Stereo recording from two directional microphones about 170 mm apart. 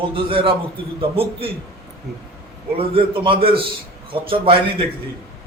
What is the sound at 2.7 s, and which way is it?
A man's voice, 30° right (ahead or behind).